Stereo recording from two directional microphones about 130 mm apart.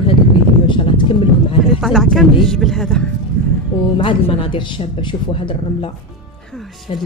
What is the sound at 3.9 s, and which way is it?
Speech, 45° left (ahead or behind).